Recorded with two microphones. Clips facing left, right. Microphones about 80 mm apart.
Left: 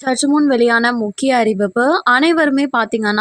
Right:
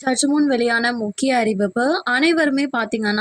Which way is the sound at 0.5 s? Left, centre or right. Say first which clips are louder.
Left 5 dB; left.